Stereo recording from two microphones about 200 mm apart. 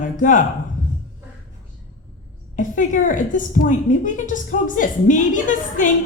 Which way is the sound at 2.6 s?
40° left (ahead or behind).